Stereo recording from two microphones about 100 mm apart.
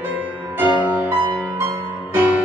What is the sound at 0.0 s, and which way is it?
Music, 15° right (ahead or behind).